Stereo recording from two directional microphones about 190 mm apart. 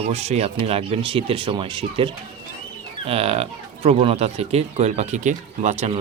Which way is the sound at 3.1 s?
30° right (ahead or behind).